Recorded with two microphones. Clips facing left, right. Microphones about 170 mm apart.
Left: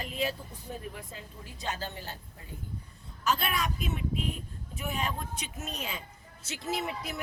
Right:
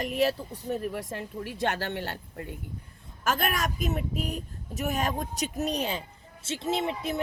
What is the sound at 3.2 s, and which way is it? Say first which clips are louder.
A woman's voice: right 2 dB; 50° right (ahead or behind).